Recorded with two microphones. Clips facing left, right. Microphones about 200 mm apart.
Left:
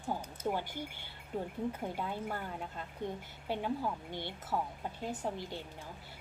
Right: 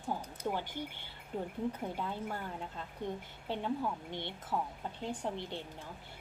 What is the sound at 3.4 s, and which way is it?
A woman's voice, 10° left (ahead or behind).